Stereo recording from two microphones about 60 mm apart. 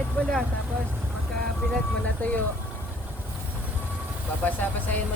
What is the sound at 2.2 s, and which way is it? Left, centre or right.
Speech, left.